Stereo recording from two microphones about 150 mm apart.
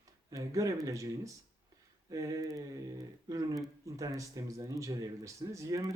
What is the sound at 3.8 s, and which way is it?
Speech, 20° right (ahead or behind).